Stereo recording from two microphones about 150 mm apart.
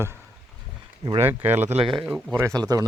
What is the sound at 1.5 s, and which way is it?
Speech, 45° right (ahead or behind).